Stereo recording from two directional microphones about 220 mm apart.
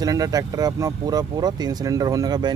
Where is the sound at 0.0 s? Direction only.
15° right (ahead or behind).